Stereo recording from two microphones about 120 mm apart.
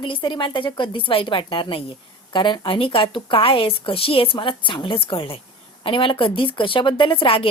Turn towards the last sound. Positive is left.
turn(degrees=50)  # may be behind; listen again after turning